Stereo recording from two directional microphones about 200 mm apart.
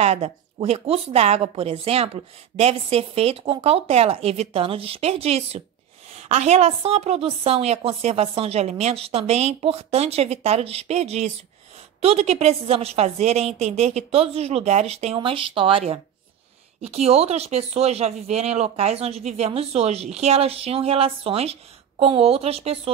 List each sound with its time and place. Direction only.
0.0 s a woman's voice: 30° right (ahead or behind)